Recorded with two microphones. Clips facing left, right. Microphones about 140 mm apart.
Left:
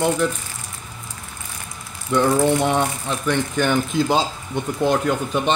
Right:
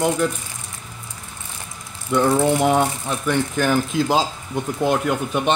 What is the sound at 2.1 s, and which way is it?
Speech, 5° right (ahead or behind).